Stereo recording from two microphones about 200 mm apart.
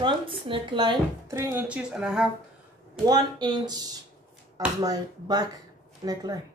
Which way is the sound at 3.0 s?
20° right (ahead or behind).